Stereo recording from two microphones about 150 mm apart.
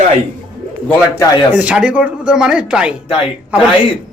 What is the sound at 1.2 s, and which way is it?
Speech, 25° left (ahead or behind).